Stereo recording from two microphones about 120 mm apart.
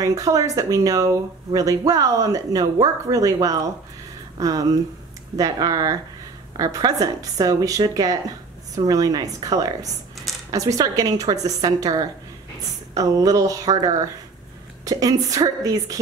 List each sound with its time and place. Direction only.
0.0 s speech: 30° right (ahead or behind)